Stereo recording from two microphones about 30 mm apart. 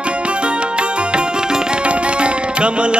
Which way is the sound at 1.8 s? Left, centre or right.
Right.